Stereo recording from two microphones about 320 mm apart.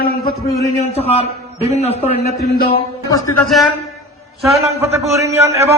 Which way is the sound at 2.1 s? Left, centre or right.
Centre.